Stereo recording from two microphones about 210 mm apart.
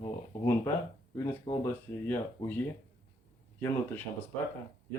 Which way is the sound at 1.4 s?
20° left (ahead or behind).